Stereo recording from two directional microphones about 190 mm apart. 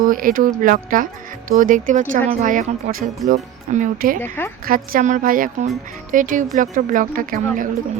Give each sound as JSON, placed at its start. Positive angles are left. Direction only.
{"t": 0.0, "sound": "speech", "side_deg": -45}
{"t": 4.2, "sound": "a woman's voice", "side_deg": 10}
{"t": 4.6, "sound": "speech", "side_deg": -50}